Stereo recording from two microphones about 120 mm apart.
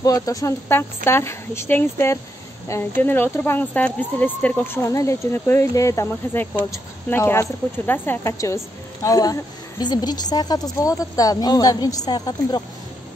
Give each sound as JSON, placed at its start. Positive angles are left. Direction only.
{"t": 0.0, "sound": "speech", "side_deg": 30}
{"t": 4.8, "sound": "a woman's voice", "side_deg": 25}